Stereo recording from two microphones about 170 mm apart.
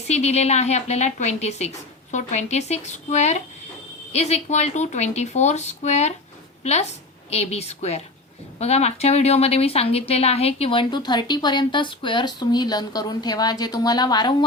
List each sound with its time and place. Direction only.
0.1 s a woman's voice: 40° left (ahead or behind); by 14.3 s 25° left (ahead or behind)